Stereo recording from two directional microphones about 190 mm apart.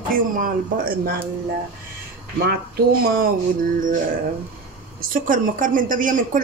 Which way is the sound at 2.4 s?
55° right (ahead or behind).